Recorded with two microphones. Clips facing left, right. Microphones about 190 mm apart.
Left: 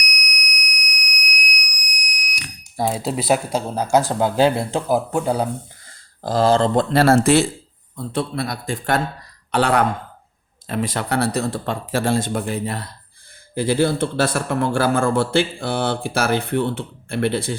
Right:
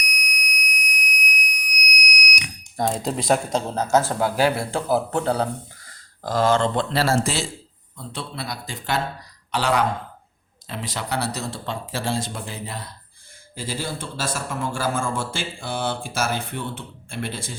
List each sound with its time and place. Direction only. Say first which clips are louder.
0.0 s fire alarm: left 1 dB; 25° right (ahead or behind)
1.8 s a sound: right 7 dB; 30° left (ahead or behind)
2.4 s speech: left 3 dB; 5° left (ahead or behind)
5.9 s speech: left 3 dB; 30° left (ahead or behind)
6.9 s a man's voice: left 8 dB; 55° left (ahead or behind)